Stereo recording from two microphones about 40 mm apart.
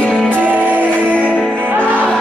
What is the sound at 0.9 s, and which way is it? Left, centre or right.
Music, left.